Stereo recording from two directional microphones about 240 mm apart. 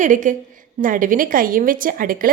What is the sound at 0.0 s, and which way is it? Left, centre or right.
Speech, right.